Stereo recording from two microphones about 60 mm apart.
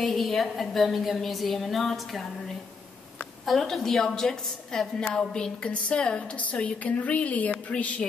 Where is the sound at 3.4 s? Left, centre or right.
Centre.